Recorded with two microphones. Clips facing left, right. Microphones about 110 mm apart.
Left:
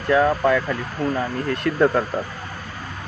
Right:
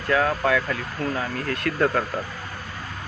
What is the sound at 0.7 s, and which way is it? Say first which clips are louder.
Speech: left 3 dB; 20° left (ahead or behind).